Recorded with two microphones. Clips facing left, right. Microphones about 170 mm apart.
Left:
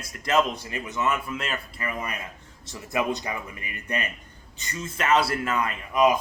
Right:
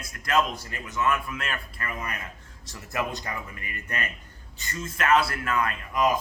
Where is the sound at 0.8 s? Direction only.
20° left (ahead or behind).